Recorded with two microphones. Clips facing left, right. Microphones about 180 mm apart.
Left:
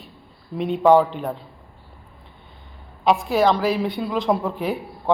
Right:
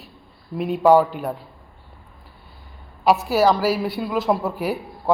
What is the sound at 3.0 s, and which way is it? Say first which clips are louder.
A woman's voice: right 1 dB; 5° right (ahead or behind).